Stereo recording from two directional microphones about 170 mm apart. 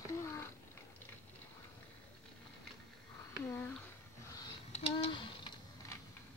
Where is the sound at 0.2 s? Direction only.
15° left (ahead or behind).